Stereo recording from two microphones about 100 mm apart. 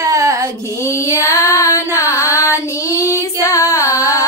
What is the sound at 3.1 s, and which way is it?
Female singing, 30° left (ahead or behind).